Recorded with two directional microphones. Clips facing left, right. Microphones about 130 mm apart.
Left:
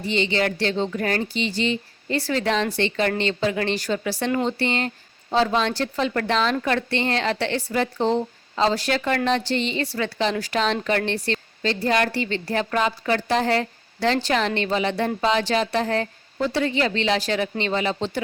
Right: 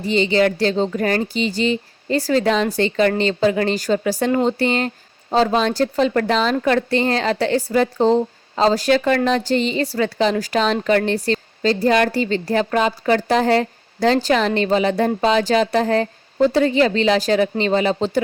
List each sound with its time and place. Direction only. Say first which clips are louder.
0.0 s a woman's voice: right 6 dB; 40° right (ahead or behind)